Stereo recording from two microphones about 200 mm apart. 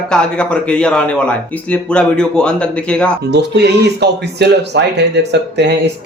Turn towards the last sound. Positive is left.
turn(degrees=-60)  # may be behind; listen again after turning